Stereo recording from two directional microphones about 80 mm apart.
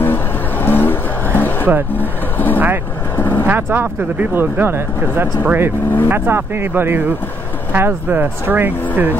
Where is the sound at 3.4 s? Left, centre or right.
Right.